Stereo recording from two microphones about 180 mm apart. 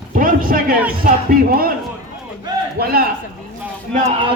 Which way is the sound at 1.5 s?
55° right (ahead or behind).